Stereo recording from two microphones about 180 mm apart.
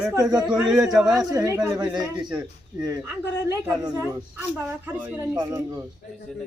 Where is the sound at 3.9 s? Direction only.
10° right (ahead or behind).